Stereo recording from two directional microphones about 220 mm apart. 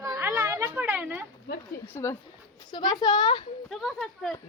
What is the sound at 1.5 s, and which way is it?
Speech, 50° left (ahead or behind).